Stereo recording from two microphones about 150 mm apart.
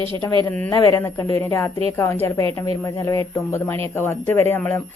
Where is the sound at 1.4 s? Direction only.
15° left (ahead or behind).